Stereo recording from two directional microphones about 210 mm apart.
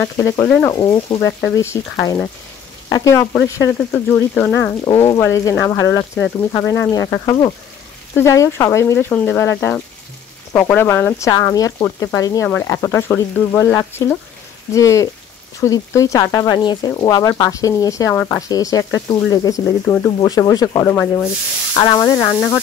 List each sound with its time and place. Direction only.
0.0 s speech: 10° left (ahead or behind)